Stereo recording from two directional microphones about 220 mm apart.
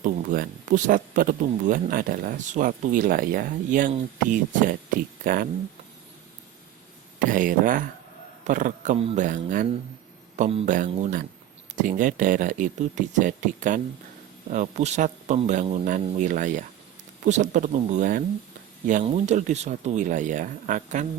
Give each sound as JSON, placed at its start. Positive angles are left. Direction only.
{"t": 0.0, "sound": "speech", "side_deg": -35}
{"t": 7.2, "sound": "speech", "side_deg": -35}